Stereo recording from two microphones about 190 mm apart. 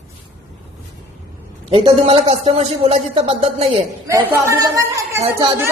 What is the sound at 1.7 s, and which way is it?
Speech, 30° right (ahead or behind).